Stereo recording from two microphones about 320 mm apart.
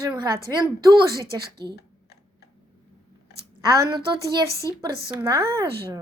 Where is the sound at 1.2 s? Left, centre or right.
Right.